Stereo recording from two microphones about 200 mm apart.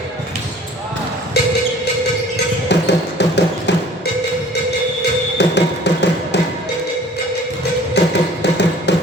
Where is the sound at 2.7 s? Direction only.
60° left (ahead or behind).